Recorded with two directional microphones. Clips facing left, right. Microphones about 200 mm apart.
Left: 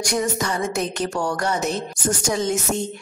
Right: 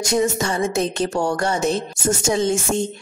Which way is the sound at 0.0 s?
25° right (ahead or behind).